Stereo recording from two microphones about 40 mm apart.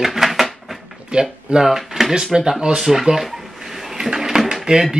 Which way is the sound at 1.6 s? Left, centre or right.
Centre.